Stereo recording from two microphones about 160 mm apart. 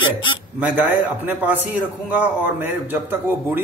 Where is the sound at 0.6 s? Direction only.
10° right (ahead or behind).